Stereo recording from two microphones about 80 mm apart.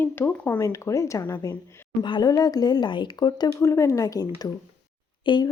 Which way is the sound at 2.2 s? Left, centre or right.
Left.